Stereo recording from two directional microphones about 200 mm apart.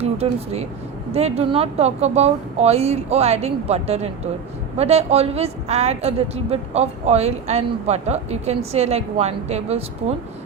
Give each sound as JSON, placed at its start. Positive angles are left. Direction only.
{"t": 0.0, "sound": "a woman's voice", "side_deg": -30}